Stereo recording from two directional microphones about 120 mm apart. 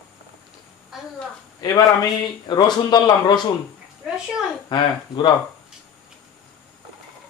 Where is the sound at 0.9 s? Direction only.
5° right (ahead or behind).